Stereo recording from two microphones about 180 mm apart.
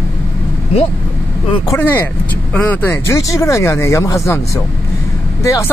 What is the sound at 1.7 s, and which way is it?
Speech, 10° left (ahead or behind).